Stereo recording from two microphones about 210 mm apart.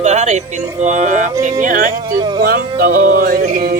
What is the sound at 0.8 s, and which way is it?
Music, 35° right (ahead or behind).